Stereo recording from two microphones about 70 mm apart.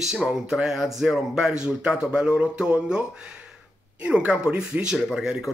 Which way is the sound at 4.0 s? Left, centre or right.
Centre.